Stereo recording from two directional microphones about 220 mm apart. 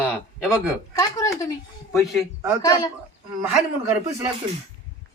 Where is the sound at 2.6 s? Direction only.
15° left (ahead or behind).